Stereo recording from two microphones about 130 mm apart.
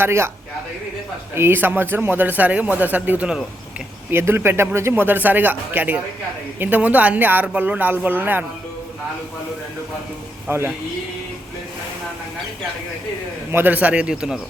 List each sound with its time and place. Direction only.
0.0 s speech: 20° right (ahead or behind)
1.4 s speech: 15° right (ahead or behind)
10.5 s speech: 15° right (ahead or behind)
13.5 s speech: 15° right (ahead or behind)